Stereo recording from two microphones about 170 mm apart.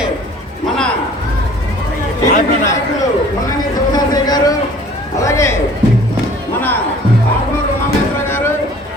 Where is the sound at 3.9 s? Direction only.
25° left (ahead or behind).